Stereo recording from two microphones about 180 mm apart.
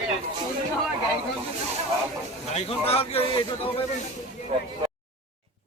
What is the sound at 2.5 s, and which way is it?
A man's voice, 35° left (ahead or behind).